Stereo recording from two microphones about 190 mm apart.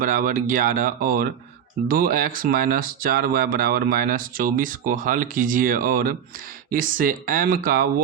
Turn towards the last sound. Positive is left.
turn(degrees=-50)  # may be behind; listen again after turning